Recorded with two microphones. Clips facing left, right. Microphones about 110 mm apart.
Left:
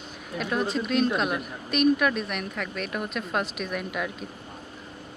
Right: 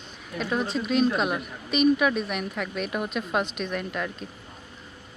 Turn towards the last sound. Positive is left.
turn(degrees=5)  # may be behind; listen again after turning